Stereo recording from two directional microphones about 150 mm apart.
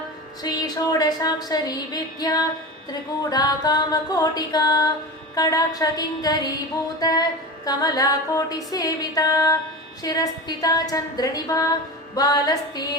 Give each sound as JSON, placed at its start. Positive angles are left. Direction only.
{"t": 0.4, "sound": "a woman's voice", "side_deg": 25}